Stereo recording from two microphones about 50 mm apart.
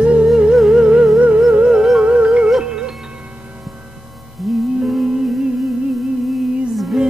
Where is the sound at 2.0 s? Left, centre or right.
Right.